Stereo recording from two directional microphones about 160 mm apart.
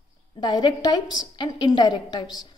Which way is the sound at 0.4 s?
25° left (ahead or behind).